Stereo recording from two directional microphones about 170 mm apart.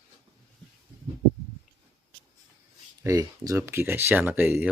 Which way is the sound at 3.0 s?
20° right (ahead or behind).